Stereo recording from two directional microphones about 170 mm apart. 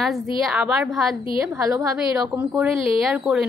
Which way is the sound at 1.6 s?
20° right (ahead or behind).